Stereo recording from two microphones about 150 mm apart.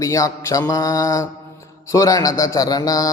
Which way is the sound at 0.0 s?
20° left (ahead or behind).